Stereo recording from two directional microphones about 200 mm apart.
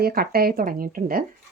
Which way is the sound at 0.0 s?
50° right (ahead or behind).